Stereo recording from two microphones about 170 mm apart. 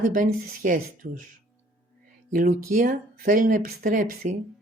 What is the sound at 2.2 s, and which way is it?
Speech, 50° right (ahead or behind).